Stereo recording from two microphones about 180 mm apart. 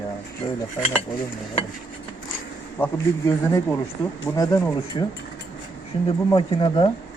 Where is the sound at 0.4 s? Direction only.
20° left (ahead or behind).